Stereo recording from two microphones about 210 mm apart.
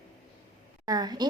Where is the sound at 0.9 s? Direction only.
20° right (ahead or behind).